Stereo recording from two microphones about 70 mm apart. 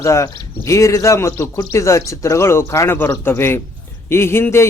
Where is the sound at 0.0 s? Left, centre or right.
Left.